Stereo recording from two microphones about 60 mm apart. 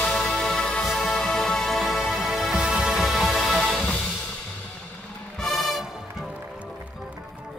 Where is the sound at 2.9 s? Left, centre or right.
Centre.